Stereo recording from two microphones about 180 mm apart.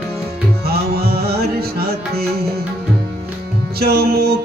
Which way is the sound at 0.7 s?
60° right (ahead or behind).